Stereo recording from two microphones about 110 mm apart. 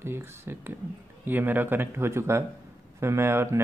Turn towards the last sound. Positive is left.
turn(degrees=-20)  # may be behind; listen again after turning